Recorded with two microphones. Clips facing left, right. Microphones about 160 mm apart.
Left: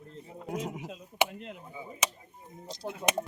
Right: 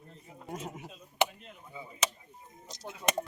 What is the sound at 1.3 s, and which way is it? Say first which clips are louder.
Chop: left 9 dB; 90° left.